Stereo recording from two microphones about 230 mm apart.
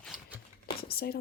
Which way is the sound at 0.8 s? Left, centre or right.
Left.